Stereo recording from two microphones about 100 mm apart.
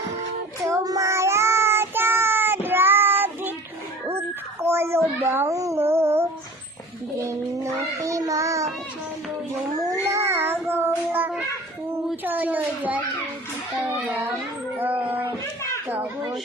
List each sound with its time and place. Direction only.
0.7 s child singing: 30° right (ahead or behind)
4.6 s a child's voice: 25° right (ahead or behind)
7.3 s child singing: 30° right (ahead or behind)
9.7 s cat: 35° right (ahead or behind)
10.0 s child singing: 30° right (ahead or behind)
12.2 s a sound: 20° right (ahead or behind)
14.8 s a sound: 20° right (ahead or behind)
15.9 s a child's voice: 20° right (ahead or behind)